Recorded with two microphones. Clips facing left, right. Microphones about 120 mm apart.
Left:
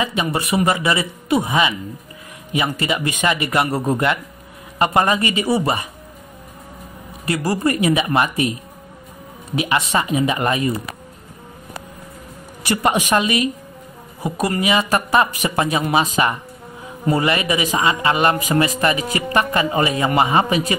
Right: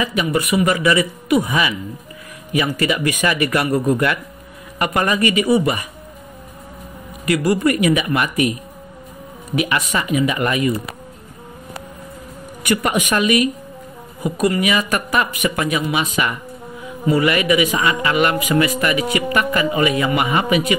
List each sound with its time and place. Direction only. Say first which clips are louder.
0.0 s speech: right 2 dB; 30° left (ahead or behind)
7.2 s speech: right 3 dB; 30° left (ahead or behind)
9.6 s speech: left 1 dB; 25° left (ahead or behind)
12.6 s speech: even; 30° left (ahead or behind)